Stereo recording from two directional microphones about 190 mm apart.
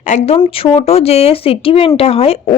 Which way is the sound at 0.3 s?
25° left (ahead or behind).